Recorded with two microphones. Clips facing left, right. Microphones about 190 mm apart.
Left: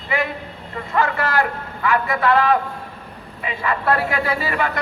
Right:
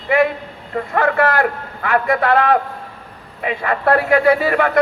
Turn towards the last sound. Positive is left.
turn(degrees=-55)  # may be behind; listen again after turning